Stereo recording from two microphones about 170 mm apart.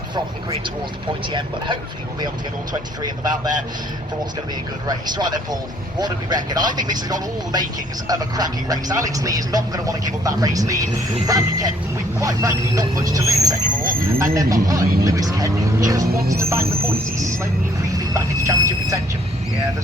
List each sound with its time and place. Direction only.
1.3 s speech: 25° right (ahead or behind)
3.0 s speech: 25° right (ahead or behind)
4.9 s speech: 25° right (ahead or behind)
16.1 s music: 65° right (ahead or behind)
16.4 s music: 15° right (ahead or behind)
17.9 s speech: 20° right (ahead or behind)